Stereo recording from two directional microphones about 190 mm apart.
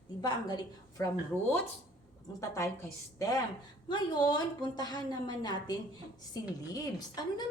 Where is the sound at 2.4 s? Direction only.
15° left (ahead or behind).